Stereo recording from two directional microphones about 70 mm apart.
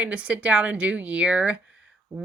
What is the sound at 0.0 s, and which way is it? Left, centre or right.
Speech, centre.